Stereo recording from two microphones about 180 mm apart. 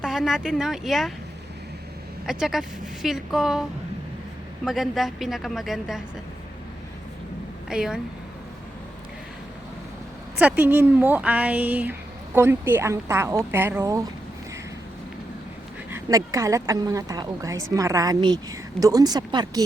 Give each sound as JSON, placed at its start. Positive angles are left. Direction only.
{"t": 0.0, "sound": "a woman's voice", "side_deg": -5}
{"t": 2.2, "sound": "a woman's voice", "side_deg": 0}
{"t": 7.7, "sound": "a woman's voice", "side_deg": -5}
{"t": 10.3, "sound": "speech", "side_deg": -10}
{"t": 15.9, "sound": "speech", "side_deg": -15}